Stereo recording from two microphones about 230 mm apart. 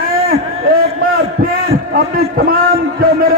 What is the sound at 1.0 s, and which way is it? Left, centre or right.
Heart sounds, right.